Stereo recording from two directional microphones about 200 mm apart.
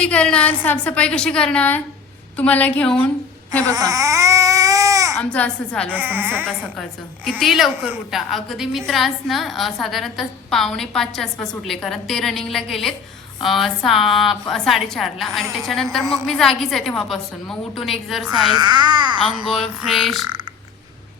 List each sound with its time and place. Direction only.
0.0 s a woman's voice: 5° left (ahead or behind)
3.7 s baby cry: 15° right (ahead or behind)
5.1 s a woman's voice: 5° left (ahead or behind)
5.9 s speech: 10° right (ahead or behind)
7.3 s a woman's voice: centre (ahead or behind)
18.5 s a child's voice: 20° right (ahead or behind)
19.5 s a woman's voice: centre (ahead or behind)